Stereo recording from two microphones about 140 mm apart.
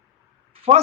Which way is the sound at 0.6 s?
45° right (ahead or behind).